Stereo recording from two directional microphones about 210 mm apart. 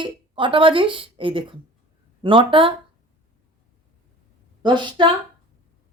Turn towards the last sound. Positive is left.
turn(degrees=-20)  # may be behind; listen again after turning